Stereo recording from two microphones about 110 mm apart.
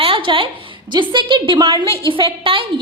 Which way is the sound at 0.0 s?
55° right (ahead or behind).